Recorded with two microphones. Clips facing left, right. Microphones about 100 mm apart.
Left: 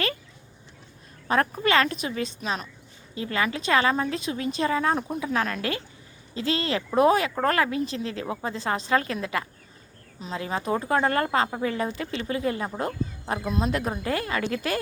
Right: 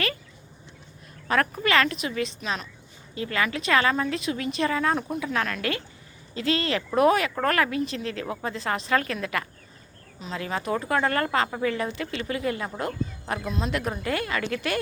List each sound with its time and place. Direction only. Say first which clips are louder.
1.6 s a woman's voice: left 1 dB; 35° left (ahead or behind)